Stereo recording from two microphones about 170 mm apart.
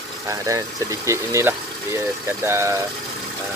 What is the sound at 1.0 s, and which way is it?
Speech, 15° right (ahead or behind).